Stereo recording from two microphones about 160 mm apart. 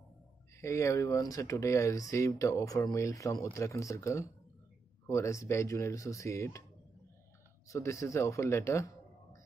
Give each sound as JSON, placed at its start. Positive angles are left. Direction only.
{"t": 0.6, "sound": "speech", "side_deg": 20}
{"t": 7.6, "sound": "speech", "side_deg": 20}